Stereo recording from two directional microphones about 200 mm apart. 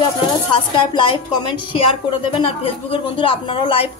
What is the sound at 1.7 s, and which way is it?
A woman's voice, 25° left (ahead or behind).